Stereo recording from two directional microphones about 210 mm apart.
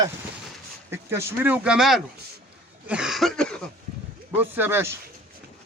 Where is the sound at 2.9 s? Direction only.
5° right (ahead or behind).